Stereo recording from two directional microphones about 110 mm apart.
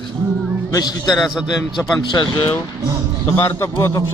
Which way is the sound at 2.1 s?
45° left (ahead or behind).